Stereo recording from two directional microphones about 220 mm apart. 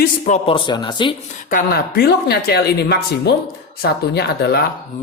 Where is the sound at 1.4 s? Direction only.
40° left (ahead or behind).